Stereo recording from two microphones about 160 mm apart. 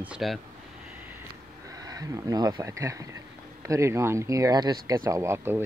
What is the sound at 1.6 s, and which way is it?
Speech, 25° right (ahead or behind).